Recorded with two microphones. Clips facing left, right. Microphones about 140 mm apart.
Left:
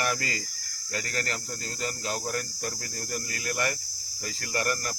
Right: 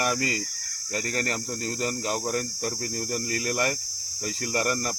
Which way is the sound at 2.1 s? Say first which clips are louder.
Right 2 dB; 25° right (ahead or behind).